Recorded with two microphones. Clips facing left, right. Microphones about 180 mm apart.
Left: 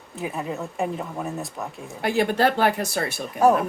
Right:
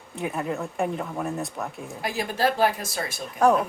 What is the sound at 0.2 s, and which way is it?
Speech, centre (ahead or behind).